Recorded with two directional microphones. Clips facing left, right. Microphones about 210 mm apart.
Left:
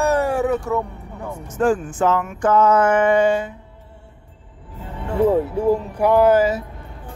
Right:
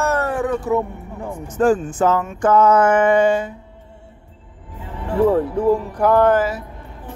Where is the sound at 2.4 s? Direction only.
50° right (ahead or behind).